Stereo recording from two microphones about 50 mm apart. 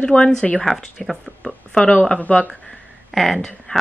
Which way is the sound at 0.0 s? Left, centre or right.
Centre.